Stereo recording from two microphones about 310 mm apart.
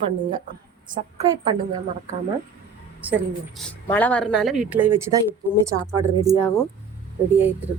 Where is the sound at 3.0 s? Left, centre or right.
Centre.